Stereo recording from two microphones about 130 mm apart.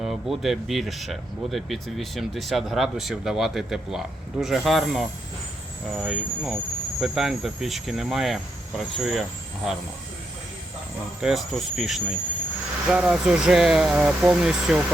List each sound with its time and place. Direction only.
0.0 s speech: centre (ahead or behind)
11.2 s speech: 5° right (ahead or behind)